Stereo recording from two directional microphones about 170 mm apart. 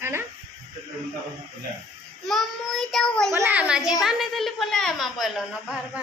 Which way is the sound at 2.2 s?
Centre (ahead or behind).